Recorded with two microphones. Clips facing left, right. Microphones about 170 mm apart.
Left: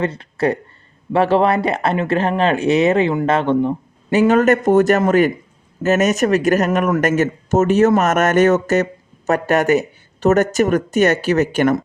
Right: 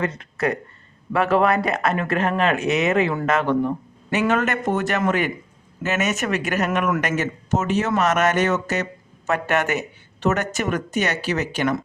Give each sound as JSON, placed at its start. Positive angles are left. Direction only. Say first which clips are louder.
{"t": 0.0, "sound": "speech", "louder": "left 5 dB", "side_deg": 30}